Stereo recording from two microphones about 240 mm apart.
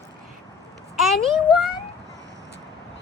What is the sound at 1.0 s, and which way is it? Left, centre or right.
Speech, centre.